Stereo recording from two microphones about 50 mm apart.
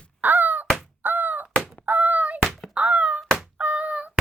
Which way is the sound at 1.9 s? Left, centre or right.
Right.